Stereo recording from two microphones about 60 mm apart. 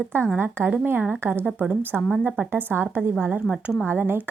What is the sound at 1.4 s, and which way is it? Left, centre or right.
Speech, centre.